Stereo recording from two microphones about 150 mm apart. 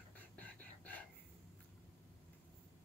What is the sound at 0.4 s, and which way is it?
Whispering, 10° left (ahead or behind).